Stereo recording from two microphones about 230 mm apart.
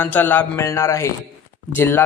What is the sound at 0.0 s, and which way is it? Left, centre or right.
A man's voice, centre.